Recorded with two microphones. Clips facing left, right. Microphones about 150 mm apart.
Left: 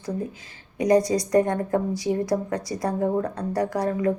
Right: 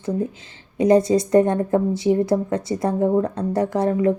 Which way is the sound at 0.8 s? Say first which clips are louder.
Right 4 dB; 25° right (ahead or behind).